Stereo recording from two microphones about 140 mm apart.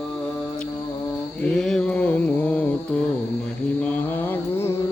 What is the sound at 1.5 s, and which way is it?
Mantra, 5° left (ahead or behind).